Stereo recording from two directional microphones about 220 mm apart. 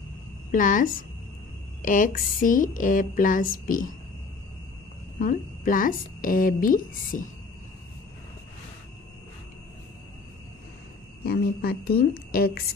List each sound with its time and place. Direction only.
0.5 s speech: 35° left (ahead or behind)
5.2 s speech: 40° left (ahead or behind)
11.2 s a woman's voice: 45° left (ahead or behind)